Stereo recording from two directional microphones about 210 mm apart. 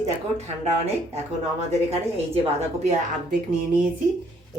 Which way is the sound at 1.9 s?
30° right (ahead or behind).